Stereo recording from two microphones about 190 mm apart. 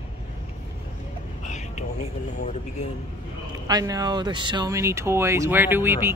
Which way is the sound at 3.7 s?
20° right (ahead or behind).